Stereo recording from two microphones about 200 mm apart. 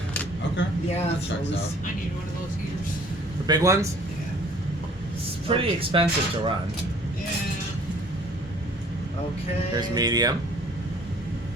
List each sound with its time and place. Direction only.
3.4 s a man's voice: 20° right (ahead or behind)
5.5 s speech: 25° right (ahead or behind)
9.7 s speech: 20° right (ahead or behind)